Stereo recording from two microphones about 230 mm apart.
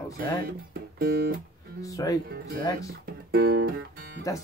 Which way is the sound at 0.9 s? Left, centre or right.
Right.